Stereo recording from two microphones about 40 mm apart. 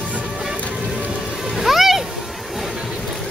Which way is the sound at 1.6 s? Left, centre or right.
Centre.